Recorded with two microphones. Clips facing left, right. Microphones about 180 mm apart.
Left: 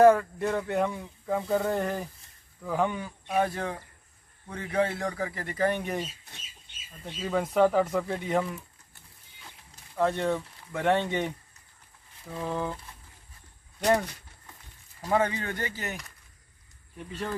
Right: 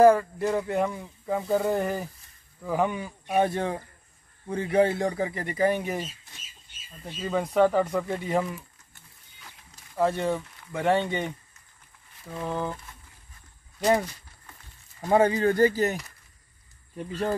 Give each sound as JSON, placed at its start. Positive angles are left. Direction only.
{"t": 0.0, "sound": "speech", "side_deg": 0}
{"t": 3.3, "sound": "speech", "side_deg": -25}
{"t": 7.1, "sound": "speech", "side_deg": 0}
{"t": 9.9, "sound": "speech", "side_deg": -5}
{"t": 15.0, "sound": "speech", "side_deg": -30}